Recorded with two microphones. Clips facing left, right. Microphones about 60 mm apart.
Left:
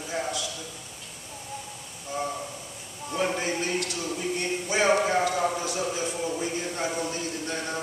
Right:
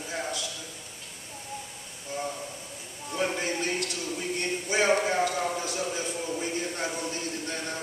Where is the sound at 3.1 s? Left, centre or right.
Centre.